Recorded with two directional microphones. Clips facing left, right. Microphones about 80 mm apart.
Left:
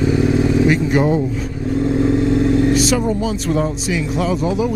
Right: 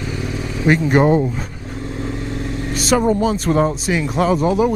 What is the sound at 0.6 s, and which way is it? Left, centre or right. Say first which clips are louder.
Speech: right 1 dB; right.